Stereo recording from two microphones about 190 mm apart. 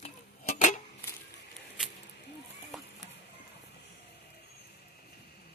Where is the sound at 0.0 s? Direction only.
35° left (ahead or behind).